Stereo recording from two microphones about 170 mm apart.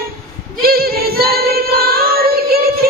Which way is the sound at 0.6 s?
60° right (ahead or behind).